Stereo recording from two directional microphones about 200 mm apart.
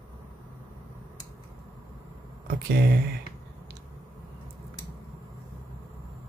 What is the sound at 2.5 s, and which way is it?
Speech, 50° right (ahead or behind).